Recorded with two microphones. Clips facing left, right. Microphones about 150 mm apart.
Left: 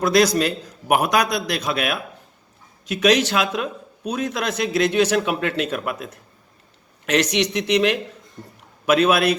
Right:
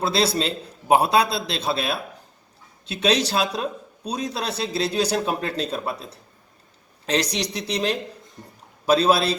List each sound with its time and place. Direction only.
0.0 s a man's voice: 30° right (ahead or behind)